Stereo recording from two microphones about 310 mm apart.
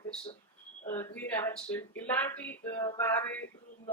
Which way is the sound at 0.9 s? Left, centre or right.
Centre.